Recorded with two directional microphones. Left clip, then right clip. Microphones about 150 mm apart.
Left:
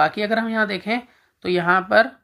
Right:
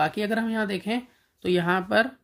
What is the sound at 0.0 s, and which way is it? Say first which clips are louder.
Speech: left 6 dB; 20° right (ahead or behind).